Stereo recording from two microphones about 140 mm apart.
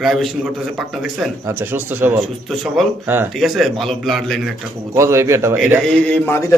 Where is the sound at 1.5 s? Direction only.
15° right (ahead or behind).